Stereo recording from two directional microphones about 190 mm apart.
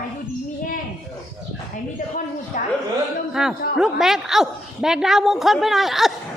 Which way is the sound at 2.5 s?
40° left (ahead or behind).